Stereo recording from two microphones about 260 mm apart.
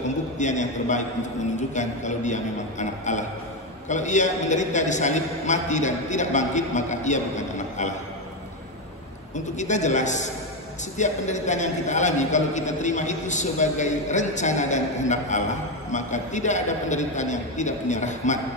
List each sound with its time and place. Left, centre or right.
0.4 s a man's voice: left
9.6 s a man's voice: left